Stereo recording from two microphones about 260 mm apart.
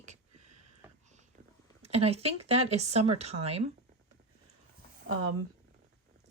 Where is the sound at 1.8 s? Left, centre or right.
Right.